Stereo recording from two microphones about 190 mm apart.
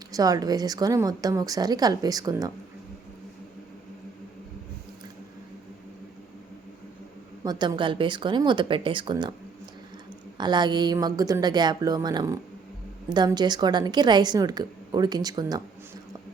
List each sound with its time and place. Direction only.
0.1 s a woman's voice: 20° right (ahead or behind)
7.4 s a woman's voice: 25° right (ahead or behind)
10.3 s a woman's voice: 20° right (ahead or behind)